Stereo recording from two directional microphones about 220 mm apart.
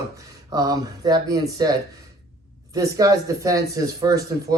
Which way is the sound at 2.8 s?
15° right (ahead or behind).